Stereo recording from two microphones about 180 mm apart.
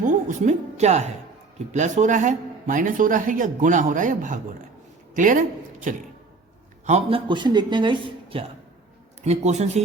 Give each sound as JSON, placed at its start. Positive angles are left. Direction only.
{"t": 0.0, "sound": "music", "side_deg": -45}
{"t": 1.7, "sound": "speech", "side_deg": -40}
{"t": 7.3, "sound": "a woman's voice", "side_deg": -25}